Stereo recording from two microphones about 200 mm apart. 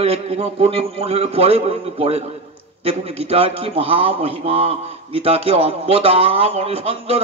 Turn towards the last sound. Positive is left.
turn(degrees=-30)  # may be behind; listen again after turning